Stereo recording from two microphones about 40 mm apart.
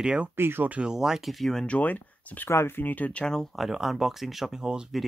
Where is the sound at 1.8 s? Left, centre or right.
Left.